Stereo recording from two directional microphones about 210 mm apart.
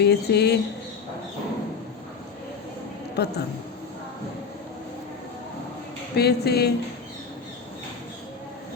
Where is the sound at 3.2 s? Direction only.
50° left (ahead or behind).